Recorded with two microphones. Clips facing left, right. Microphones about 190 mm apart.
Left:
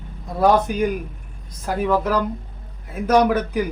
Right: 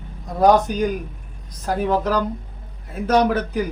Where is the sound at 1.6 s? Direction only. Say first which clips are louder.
Right 1 dB; 35° right (ahead or behind).